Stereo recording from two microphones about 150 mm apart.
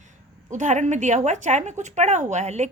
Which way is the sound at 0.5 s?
55° right (ahead or behind).